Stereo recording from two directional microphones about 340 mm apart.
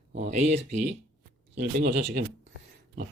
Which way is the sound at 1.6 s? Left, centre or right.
Right.